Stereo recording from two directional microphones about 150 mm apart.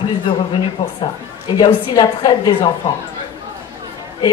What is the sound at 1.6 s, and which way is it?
Speech, 25° left (ahead or behind).